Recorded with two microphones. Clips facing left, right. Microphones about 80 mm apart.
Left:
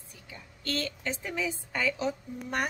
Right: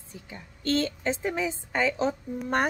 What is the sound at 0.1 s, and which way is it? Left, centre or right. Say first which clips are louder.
A woman's voice: right 6 dB; right.